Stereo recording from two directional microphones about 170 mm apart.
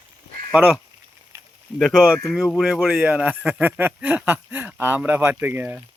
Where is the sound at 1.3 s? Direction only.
15° right (ahead or behind).